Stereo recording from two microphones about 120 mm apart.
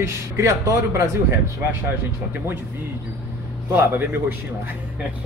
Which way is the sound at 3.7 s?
15° right (ahead or behind).